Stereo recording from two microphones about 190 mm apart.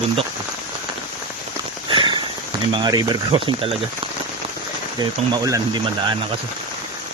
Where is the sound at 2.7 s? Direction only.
20° right (ahead or behind).